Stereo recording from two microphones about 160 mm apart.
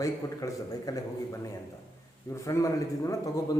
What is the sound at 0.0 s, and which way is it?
A man's voice, 20° left (ahead or behind).